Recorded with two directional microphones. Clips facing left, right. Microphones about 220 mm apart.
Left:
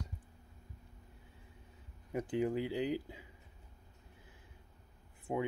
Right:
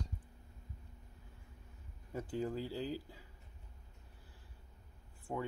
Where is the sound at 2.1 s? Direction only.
15° left (ahead or behind).